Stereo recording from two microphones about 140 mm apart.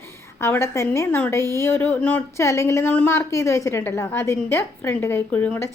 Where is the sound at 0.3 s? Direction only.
20° left (ahead or behind).